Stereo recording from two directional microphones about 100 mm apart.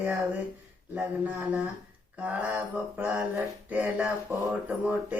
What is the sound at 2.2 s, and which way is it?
Speech, 15° right (ahead or behind).